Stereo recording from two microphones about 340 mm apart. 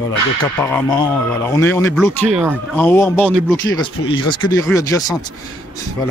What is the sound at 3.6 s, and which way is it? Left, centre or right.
Speech, left.